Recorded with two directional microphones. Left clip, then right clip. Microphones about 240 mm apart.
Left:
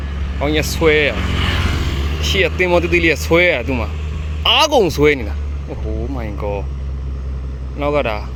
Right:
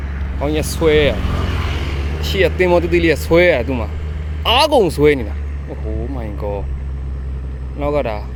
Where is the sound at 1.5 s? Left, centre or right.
Left.